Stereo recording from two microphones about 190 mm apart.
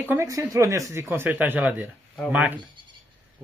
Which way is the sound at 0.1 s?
15° right (ahead or behind).